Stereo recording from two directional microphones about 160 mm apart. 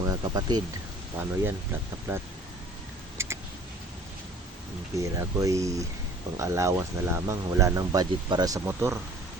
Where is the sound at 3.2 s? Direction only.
15° right (ahead or behind).